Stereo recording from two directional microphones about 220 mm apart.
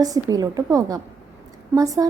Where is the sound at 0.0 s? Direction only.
15° right (ahead or behind).